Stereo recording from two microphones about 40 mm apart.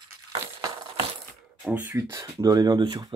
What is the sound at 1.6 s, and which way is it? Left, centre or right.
Speech, right.